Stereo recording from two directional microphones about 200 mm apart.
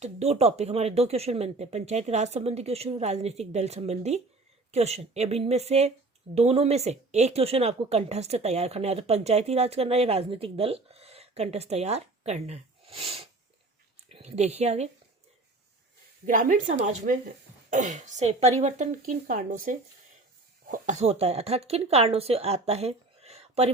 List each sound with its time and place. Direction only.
0.0 s speech: 35° right (ahead or behind)
13.9 s a sound: 35° right (ahead or behind)
16.2 s speech: 40° right (ahead or behind)